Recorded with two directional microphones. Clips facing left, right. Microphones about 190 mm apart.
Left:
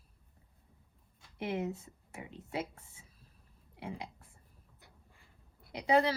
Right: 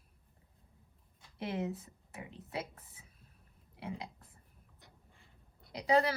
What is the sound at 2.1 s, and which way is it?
Speech, 25° left (ahead or behind).